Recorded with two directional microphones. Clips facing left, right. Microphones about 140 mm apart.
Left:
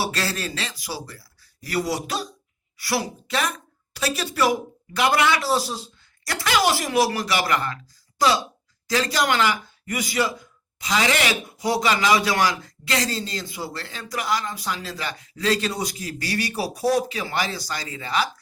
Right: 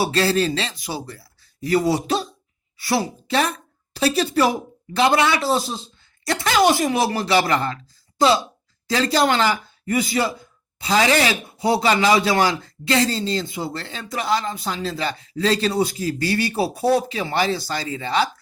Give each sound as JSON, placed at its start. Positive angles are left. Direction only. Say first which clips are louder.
{"t": 0.0, "sound": "a woman's voice", "louder": "right 8 dB", "side_deg": -25}